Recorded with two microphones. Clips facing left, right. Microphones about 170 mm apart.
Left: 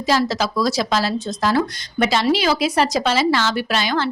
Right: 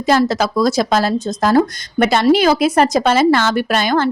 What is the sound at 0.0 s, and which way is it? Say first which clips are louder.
Speech: right 5 dB; 55° right (ahead or behind).